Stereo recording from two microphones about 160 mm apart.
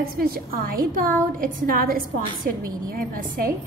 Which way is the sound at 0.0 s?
70° right (ahead or behind).